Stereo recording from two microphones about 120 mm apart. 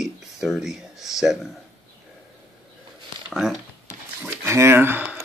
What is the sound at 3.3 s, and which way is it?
Speech, 5° right (ahead or behind).